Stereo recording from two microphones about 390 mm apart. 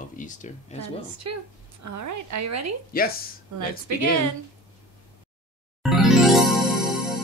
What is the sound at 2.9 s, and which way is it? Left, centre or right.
Speech, left.